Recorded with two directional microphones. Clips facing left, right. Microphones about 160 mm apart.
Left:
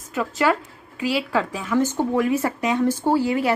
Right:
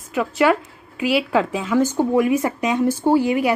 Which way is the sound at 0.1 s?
15° right (ahead or behind).